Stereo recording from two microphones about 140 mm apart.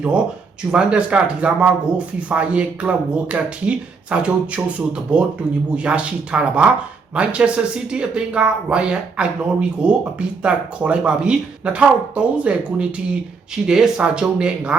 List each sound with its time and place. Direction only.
0.7 s speech: 5° right (ahead or behind)